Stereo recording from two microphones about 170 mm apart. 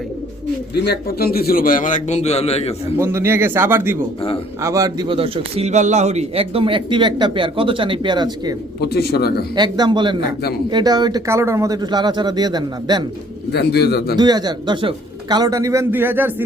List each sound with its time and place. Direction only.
0.7 s a man's voice: 75° left (ahead or behind); by 2.7 s 35° left (ahead or behind)
3.0 s a man's voice: 15° right (ahead or behind)
8.8 s speech: 70° left (ahead or behind)
9.6 s a man's voice: 25° right (ahead or behind)
13.5 s speech: 75° left (ahead or behind)
14.2 s a man's voice: 25° right (ahead or behind)